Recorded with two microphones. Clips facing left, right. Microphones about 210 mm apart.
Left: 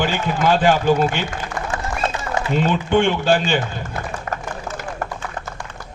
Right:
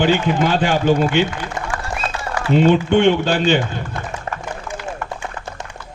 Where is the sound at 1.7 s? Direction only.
25° left (ahead or behind).